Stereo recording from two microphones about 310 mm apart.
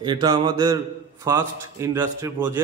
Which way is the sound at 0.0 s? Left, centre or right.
Centre.